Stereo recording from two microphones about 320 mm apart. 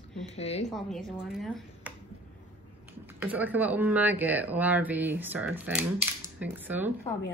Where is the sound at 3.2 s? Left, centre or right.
Centre.